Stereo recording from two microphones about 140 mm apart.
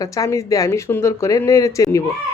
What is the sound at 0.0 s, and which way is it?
A woman's voice, 25° left (ahead or behind).